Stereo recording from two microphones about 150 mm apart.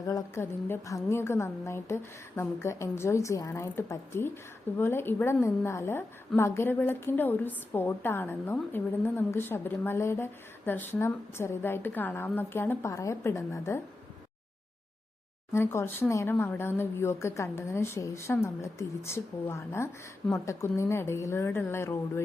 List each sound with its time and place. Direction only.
0.1 s a woman's voice: 20° left (ahead or behind)
15.5 s a woman's voice: 15° left (ahead or behind)